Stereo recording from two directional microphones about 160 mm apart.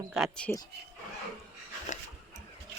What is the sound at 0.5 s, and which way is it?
Speech, 15° left (ahead or behind).